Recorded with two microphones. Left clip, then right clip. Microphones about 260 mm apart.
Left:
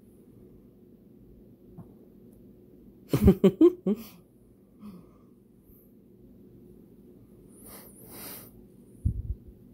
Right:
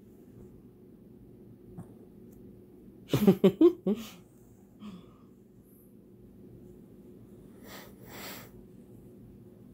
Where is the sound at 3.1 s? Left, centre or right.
Left.